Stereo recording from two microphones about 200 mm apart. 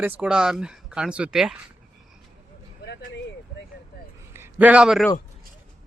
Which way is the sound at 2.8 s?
55° left (ahead or behind).